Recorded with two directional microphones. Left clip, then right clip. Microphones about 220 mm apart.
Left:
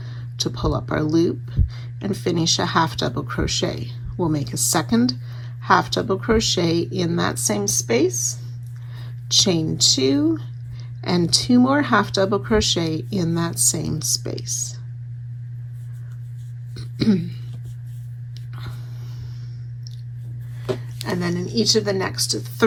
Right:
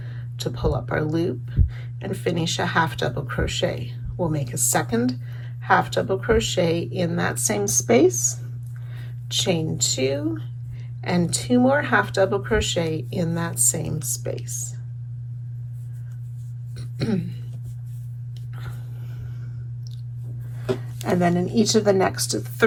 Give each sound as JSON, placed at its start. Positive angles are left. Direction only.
{"t": 0.3, "sound": "speech", "side_deg": 25}
{"t": 7.6, "sound": "speech", "side_deg": 5}
{"t": 9.3, "sound": "speech", "side_deg": 25}
{"t": 16.7, "sound": "a sound", "side_deg": 25}
{"t": 20.7, "sound": "speech", "side_deg": 5}